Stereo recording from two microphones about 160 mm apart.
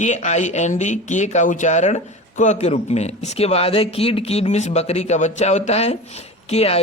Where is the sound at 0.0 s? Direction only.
45° left (ahead or behind).